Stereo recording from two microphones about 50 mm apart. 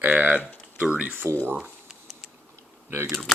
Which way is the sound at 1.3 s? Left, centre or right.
Right.